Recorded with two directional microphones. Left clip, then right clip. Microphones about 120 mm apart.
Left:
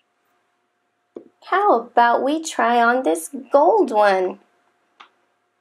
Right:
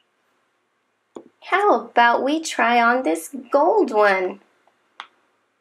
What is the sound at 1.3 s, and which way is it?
Speech, 15° left (ahead or behind).